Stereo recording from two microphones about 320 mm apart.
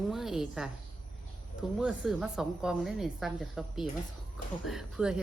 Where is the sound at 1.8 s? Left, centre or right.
Centre.